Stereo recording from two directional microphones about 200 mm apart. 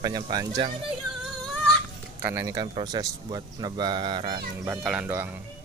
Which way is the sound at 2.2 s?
15° right (ahead or behind).